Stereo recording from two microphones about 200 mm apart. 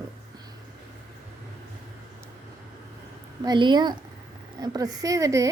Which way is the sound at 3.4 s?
20° right (ahead or behind).